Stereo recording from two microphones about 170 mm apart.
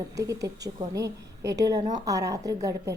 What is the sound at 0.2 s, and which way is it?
A woman's voice, 20° right (ahead or behind).